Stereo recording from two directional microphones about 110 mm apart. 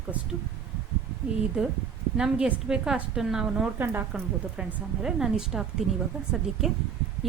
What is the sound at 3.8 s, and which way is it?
Speech, 20° right (ahead or behind).